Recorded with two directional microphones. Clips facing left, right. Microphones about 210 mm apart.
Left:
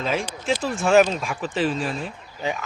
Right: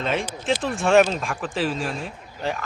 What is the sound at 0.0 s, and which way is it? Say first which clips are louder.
Speech: even; centre (ahead or behind).